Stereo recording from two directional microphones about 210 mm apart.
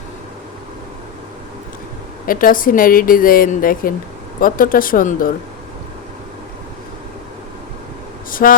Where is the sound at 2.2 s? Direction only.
40° left (ahead or behind).